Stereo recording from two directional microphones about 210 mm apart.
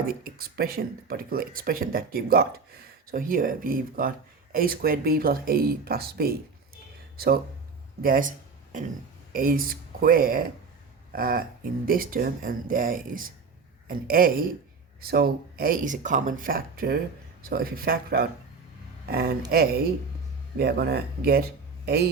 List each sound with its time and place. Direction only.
0.1 s speech: 45° right (ahead or behind)
8.0 s speech: 45° right (ahead or behind)
8.7 s a sound: 40° right (ahead or behind)
9.3 s speech: 40° right (ahead or behind)
20.6 s a man's voice: 50° right (ahead or behind)